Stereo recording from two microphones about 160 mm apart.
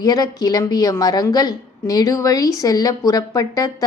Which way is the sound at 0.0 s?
25° left (ahead or behind).